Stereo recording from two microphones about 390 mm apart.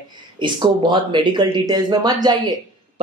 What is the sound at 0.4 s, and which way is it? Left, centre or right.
Speech, centre.